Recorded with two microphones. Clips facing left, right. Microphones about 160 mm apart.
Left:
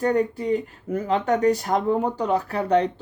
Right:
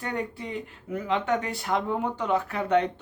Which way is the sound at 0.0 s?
40° left (ahead or behind).